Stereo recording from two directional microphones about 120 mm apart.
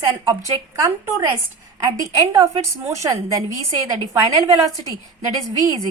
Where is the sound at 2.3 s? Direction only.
25° right (ahead or behind).